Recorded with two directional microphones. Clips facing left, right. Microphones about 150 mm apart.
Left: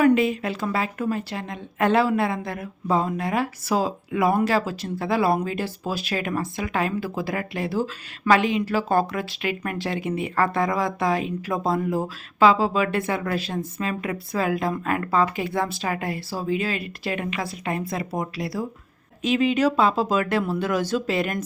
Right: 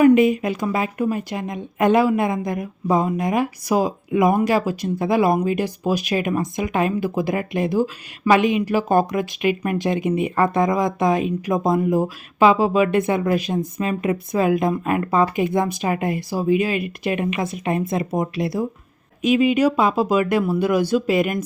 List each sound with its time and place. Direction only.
0.0 s a woman's voice: 15° right (ahead or behind)